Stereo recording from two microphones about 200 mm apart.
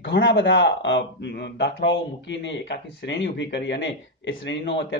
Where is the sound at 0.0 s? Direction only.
70° left (ahead or behind).